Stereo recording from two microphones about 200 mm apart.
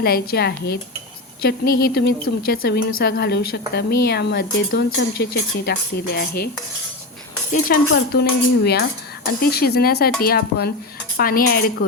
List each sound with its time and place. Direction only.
0.0 s speech: 50° left (ahead or behind)
7.5 s speech: 50° left (ahead or behind)